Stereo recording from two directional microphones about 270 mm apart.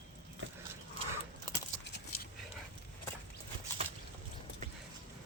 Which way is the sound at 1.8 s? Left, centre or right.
Left.